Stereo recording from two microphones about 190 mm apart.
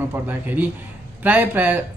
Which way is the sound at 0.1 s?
10° right (ahead or behind).